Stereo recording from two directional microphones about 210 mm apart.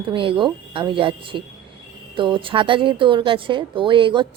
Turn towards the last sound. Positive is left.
turn(degrees=-25)  # may be behind; listen again after turning